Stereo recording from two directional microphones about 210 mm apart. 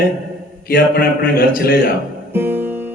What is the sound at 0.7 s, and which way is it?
Speech, 45° left (ahead or behind).